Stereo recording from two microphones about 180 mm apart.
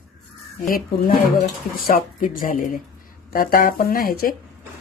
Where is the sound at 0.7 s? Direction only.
55° left (ahead or behind).